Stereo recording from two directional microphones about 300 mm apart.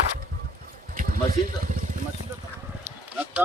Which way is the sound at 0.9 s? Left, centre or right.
Right.